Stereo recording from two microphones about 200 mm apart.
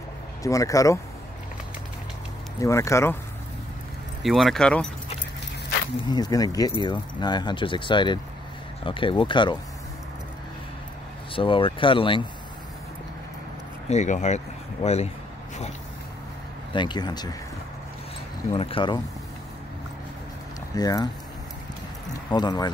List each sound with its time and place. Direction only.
0.4 s speech: 15° left (ahead or behind)
2.6 s speech: 15° left (ahead or behind)
4.2 s speech: centre (ahead or behind)
6.0 s speech: 20° left (ahead or behind)
11.3 s speech: 25° left (ahead or behind)
13.8 s speech: 35° left (ahead or behind)
16.7 s speech: 20° left (ahead or behind)
18.5 s speech: 30° left (ahead or behind)
20.7 s speech: 20° left (ahead or behind)
22.3 s speech: 20° left (ahead or behind)